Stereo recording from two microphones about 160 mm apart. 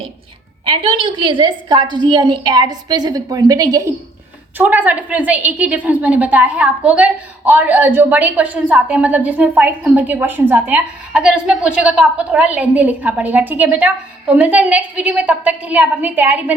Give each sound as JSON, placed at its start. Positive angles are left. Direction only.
{"t": 0.6, "sound": "a woman's voice", "side_deg": -35}